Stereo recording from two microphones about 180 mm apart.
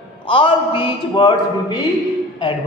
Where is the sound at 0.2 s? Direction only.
30° left (ahead or behind).